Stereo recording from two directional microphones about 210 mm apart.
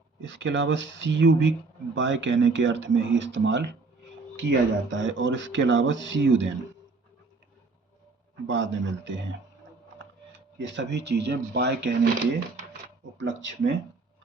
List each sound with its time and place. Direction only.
0.2 s speech: 60° right (ahead or behind)
8.4 s speech: 60° right (ahead or behind)
10.7 s speech: 55° right (ahead or behind)
13.1 s speech: 60° right (ahead or behind)